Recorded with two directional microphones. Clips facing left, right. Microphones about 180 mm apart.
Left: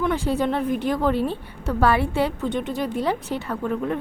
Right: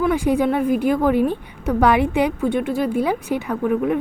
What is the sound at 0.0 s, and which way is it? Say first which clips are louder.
A woman's voice: right 5 dB; 10° right (ahead or behind).